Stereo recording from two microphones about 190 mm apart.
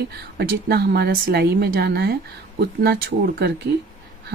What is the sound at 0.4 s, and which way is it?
Speech, 55° right (ahead or behind).